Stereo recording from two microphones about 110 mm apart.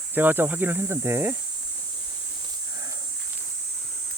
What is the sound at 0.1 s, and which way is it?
Speech, 20° right (ahead or behind).